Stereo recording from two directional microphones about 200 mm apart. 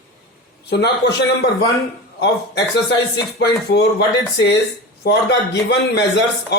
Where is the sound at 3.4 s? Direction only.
60° left (ahead or behind).